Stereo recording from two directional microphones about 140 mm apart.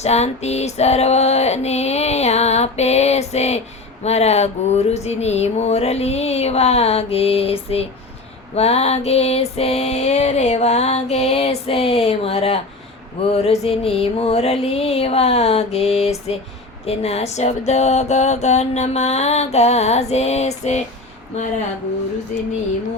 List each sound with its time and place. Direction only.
0.0 s music: 50° left (ahead or behind)